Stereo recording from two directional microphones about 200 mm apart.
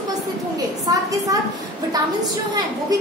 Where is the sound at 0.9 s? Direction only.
20° right (ahead or behind).